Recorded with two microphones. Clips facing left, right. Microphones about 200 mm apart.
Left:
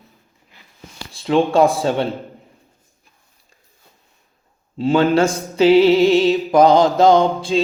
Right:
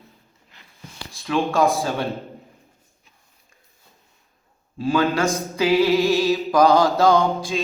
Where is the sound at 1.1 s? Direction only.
30° left (ahead or behind).